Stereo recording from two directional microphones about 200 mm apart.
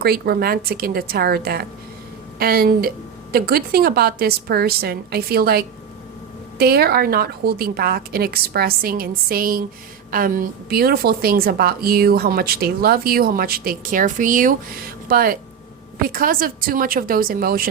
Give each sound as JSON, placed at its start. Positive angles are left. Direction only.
{"t": 0.0, "sound": "a woman's voice", "side_deg": -50}